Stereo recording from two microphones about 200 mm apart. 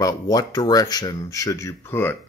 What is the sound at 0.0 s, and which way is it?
A man's voice, 20° left (ahead or behind).